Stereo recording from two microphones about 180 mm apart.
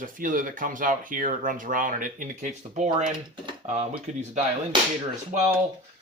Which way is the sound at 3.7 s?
40° right (ahead or behind).